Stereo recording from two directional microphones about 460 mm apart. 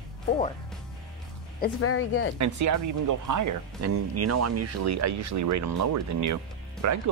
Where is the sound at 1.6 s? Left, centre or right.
Left.